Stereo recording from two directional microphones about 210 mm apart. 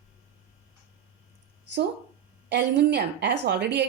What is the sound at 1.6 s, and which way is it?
A woman's voice, 55° right (ahead or behind).